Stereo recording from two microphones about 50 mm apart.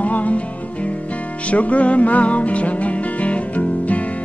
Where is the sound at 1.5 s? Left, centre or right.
Left.